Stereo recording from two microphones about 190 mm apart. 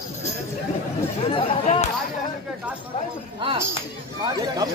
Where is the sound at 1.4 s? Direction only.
40° left (ahead or behind).